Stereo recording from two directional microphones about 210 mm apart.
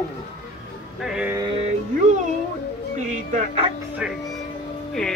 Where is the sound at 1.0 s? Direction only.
5° right (ahead or behind).